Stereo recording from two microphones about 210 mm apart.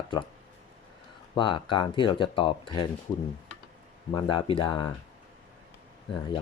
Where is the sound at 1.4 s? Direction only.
25° left (ahead or behind).